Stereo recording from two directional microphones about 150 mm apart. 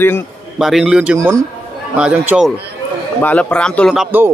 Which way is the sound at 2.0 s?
5° right (ahead or behind).